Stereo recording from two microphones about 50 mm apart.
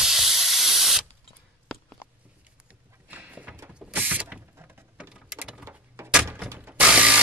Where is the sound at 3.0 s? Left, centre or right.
Right.